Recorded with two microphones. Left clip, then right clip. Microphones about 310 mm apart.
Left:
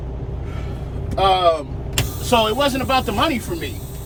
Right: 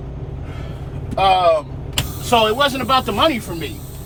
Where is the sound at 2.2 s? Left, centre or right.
Right.